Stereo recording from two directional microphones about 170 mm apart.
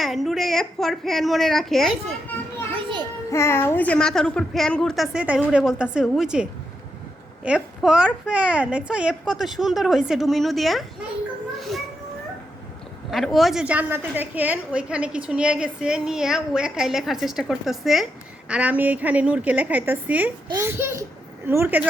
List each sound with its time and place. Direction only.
0.0 s a woman's voice: centre (ahead or behind)
2.7 s children playing: 25° right (ahead or behind)
3.3 s a woman's voice: 15° left (ahead or behind)
13.1 s a woman's voice: centre (ahead or behind)